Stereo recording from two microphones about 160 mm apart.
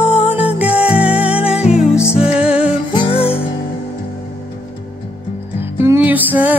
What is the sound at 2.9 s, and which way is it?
Music, 35° left (ahead or behind).